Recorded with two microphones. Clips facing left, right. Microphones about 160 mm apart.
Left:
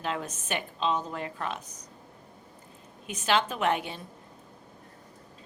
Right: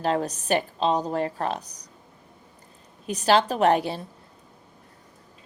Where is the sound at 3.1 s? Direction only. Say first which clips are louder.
Right 6 dB; 35° right (ahead or behind).